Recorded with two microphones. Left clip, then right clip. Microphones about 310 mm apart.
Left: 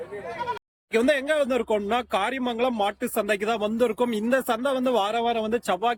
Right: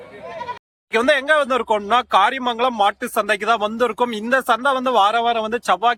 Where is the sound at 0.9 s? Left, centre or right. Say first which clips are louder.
Right 6 dB; centre.